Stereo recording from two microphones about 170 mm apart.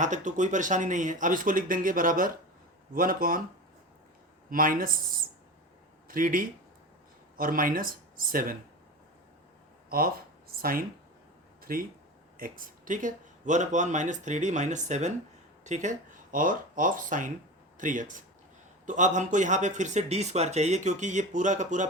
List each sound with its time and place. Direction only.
0.0 s speech: 45° right (ahead or behind)
4.4 s speech: 55° right (ahead or behind)
10.6 s speech: 60° right (ahead or behind)